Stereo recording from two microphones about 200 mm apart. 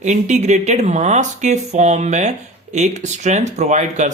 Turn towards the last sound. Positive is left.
turn(degrees=-35)  # may be behind; listen again after turning